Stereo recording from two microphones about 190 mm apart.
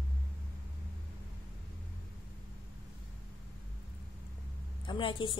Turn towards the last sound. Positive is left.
turn(degrees=25)  # may be behind; listen again after turning